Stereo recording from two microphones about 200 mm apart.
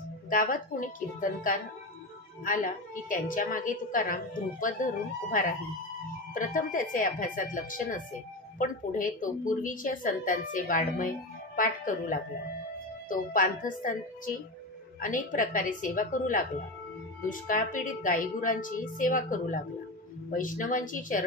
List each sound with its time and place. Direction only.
0.3 s a woman's voice: 40° left (ahead or behind)